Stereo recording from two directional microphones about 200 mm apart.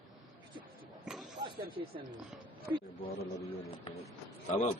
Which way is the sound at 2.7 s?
10° right (ahead or behind).